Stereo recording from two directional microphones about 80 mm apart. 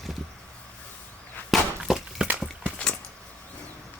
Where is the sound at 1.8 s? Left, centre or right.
Centre.